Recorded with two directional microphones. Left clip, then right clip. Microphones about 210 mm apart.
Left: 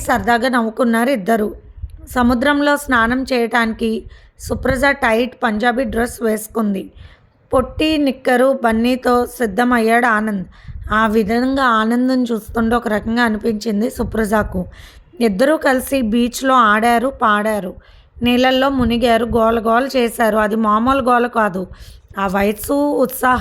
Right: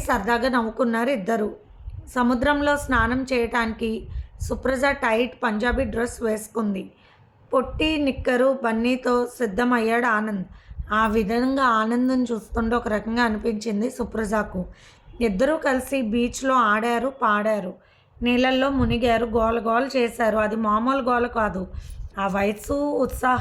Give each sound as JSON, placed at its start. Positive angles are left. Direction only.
{"t": 0.0, "sound": "a woman's voice", "side_deg": 35}